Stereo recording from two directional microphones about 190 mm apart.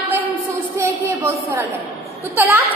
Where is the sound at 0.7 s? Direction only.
10° right (ahead or behind).